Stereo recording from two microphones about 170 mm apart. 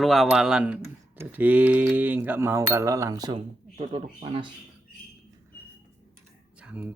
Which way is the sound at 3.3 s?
35° right (ahead or behind).